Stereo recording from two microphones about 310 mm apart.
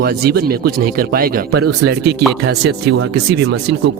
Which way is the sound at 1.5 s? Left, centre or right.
Right.